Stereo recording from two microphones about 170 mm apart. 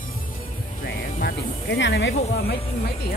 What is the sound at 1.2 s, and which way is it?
Speech, 75° left (ahead or behind).